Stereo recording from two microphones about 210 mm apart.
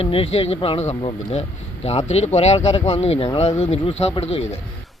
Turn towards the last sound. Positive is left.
turn(degrees=30)  # may be behind; listen again after turning